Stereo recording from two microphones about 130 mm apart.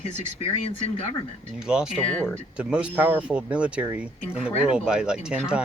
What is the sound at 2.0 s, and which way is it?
Speech, 10° left (ahead or behind).